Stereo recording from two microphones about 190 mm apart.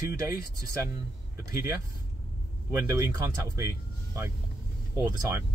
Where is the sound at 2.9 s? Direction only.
15° right (ahead or behind).